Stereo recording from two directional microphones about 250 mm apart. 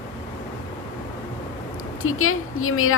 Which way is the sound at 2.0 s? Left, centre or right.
Left.